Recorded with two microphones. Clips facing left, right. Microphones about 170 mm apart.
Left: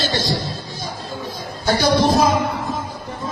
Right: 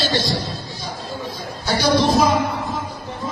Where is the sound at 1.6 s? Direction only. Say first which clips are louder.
Left 1 dB; 45° left (ahead or behind).